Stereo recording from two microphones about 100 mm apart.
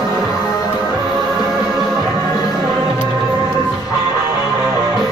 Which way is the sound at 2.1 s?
40° left (ahead or behind).